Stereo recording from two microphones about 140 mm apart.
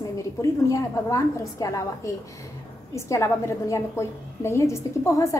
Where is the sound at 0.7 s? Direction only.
25° left (ahead or behind).